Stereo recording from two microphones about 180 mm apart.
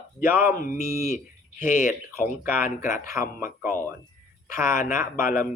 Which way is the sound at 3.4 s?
50° left (ahead or behind).